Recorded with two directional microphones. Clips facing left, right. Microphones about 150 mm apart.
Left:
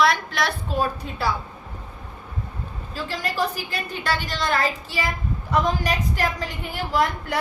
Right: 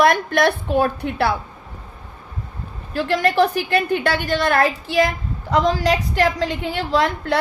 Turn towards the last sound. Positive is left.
turn(degrees=-85)